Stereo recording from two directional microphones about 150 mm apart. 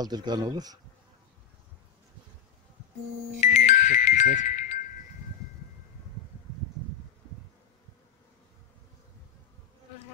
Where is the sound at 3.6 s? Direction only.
55° left (ahead or behind).